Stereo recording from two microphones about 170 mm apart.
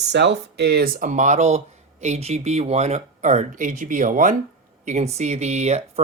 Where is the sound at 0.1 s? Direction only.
90° right.